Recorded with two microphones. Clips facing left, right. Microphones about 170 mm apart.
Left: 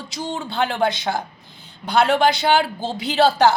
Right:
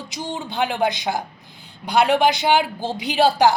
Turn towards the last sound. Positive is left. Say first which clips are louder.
# left 1 dB
turn(degrees=-15)  # may be behind; listen again after turning